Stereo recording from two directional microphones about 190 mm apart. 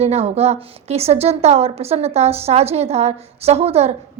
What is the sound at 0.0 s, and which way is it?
A woman's voice, 35° right (ahead or behind).